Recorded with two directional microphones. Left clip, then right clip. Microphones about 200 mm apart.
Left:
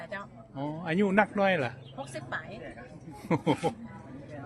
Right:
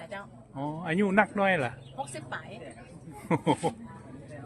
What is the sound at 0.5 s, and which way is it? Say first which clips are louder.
Speech: right 1 dB; 5° right (ahead or behind).